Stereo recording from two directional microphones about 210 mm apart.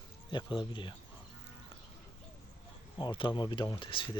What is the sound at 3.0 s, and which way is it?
Speech, 20° left (ahead or behind).